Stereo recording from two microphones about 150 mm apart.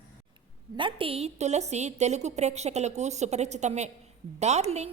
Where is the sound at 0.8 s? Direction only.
35° right (ahead or behind).